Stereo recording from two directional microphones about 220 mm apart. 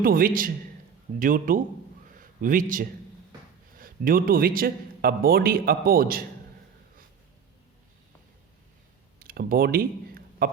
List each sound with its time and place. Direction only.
0.0 s a man's voice: 40° right (ahead or behind)
9.1 s speech: 40° right (ahead or behind)
10.4 s a sound: 40° right (ahead or behind)